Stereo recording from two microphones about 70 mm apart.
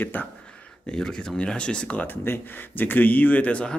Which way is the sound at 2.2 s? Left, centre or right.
Left.